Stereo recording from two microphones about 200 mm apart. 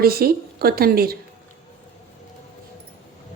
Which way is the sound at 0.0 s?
50° right (ahead or behind).